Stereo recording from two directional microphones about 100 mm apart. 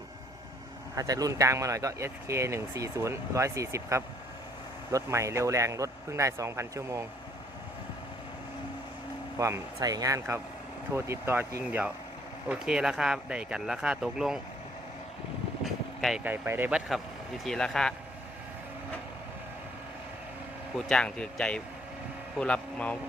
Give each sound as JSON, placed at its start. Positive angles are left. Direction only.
{"t": 0.9, "sound": "speech", "side_deg": -35}
{"t": 9.4, "sound": "speech", "side_deg": -30}
{"t": 11.6, "sound": "speech", "side_deg": -15}
{"t": 15.6, "sound": "vehicle", "side_deg": 0}
{"t": 16.2, "sound": "speech", "side_deg": -20}
{"t": 16.7, "sound": "speech", "side_deg": 0}
{"t": 20.7, "sound": "speech", "side_deg": 5}